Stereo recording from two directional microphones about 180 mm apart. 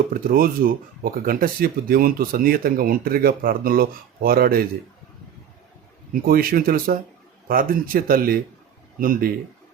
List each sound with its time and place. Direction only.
0.1 s speech: 55° right (ahead or behind)
6.2 s speech: 55° right (ahead or behind)